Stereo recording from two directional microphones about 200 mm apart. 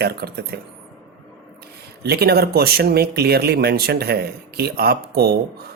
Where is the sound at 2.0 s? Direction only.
50° right (ahead or behind).